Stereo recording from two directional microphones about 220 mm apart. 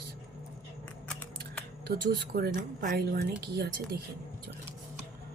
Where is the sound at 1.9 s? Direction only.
45° right (ahead or behind).